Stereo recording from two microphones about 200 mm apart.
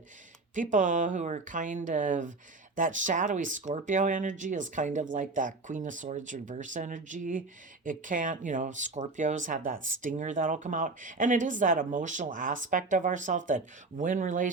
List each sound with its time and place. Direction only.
0.5 s speech: 40° right (ahead or behind)